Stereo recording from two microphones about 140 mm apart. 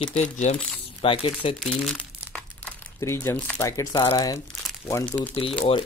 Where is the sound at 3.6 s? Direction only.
25° left (ahead or behind).